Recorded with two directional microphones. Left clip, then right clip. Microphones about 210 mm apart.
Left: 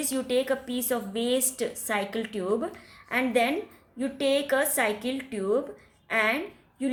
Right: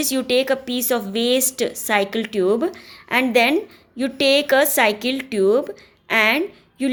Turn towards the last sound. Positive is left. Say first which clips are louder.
# right 8 dB
turn(degrees=-40)  # may be behind; listen again after turning